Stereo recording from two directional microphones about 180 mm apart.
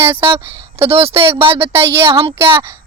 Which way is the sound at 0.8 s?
35° right (ahead or behind).